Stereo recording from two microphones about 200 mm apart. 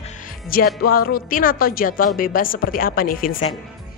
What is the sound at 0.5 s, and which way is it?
Speech, 45° left (ahead or behind).